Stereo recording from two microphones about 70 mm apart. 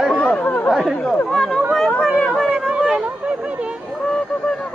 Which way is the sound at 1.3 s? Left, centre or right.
Centre.